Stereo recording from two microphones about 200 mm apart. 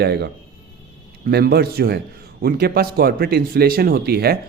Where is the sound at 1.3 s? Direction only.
50° right (ahead or behind).